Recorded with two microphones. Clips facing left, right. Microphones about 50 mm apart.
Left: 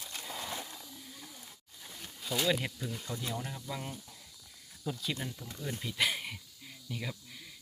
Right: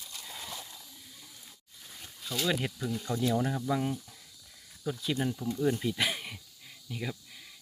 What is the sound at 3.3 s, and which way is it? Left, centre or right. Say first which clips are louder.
Speech: right 10 dB; centre.